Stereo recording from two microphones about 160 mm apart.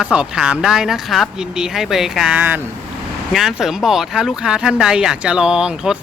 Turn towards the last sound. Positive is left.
turn(degrees=-5)  # may be behind; listen again after turning